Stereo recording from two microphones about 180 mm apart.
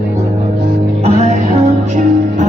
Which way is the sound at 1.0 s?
35° right (ahead or behind).